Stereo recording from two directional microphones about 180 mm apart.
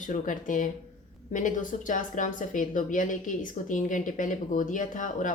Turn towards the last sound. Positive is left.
turn(degrees=45)  # may be behind; listen again after turning